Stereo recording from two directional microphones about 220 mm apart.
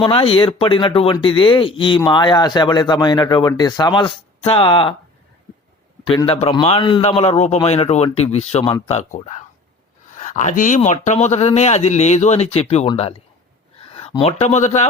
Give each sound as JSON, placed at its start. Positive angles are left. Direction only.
{"t": 0.0, "sound": "speech", "side_deg": 25}
{"t": 6.1, "sound": "speech", "side_deg": 25}